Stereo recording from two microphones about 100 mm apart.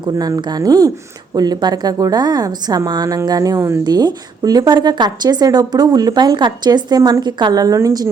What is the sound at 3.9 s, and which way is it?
A woman's voice, 45° right (ahead or behind).